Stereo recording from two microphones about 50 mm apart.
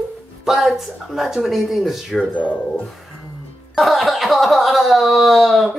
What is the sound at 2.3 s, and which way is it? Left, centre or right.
Speech, left.